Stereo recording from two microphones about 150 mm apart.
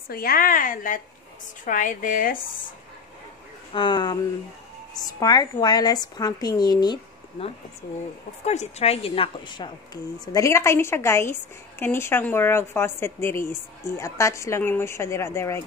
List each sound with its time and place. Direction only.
0.1 s a woman's voice: 80° left; by 2.3 s 65° left (ahead or behind)
3.7 s a woman's voice: 30° left (ahead or behind)
8.5 s a woman's voice: 45° left (ahead or behind)
10.2 s a woman's voice: 20° left (ahead or behind)